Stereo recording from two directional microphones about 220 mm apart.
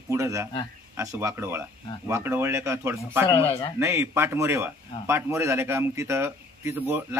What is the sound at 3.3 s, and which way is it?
Speech, 15° left (ahead or behind).